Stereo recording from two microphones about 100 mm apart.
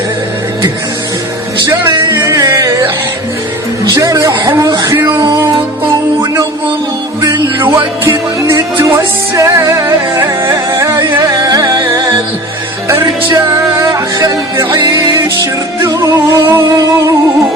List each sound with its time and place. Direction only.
2.1 s music: 30° right (ahead or behind)
3.8 s a sound: 35° right (ahead or behind)
7.6 s music: 25° right (ahead or behind)
11.3 s music: 40° right (ahead or behind)
12.9 s speech: 30° right (ahead or behind)
15.8 s music: 30° right (ahead or behind)